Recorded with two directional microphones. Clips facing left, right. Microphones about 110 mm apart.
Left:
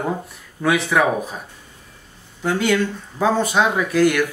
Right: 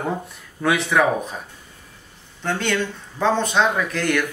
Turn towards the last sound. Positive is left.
turn(degrees=5)  # may be behind; listen again after turning